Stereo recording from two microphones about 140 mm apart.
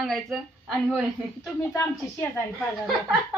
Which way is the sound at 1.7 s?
15° left (ahead or behind).